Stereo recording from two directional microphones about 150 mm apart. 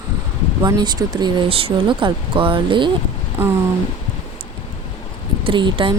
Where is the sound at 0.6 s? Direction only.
25° right (ahead or behind).